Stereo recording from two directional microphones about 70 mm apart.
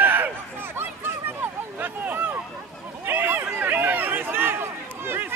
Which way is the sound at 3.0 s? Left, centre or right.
Right.